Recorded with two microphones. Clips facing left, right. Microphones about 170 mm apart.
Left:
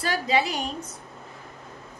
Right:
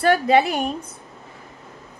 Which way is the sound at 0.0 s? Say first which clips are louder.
Right 8 dB; 60° right (ahead or behind).